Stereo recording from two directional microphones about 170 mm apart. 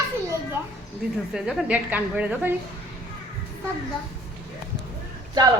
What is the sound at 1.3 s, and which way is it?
A woman's voice, 5° right (ahead or behind).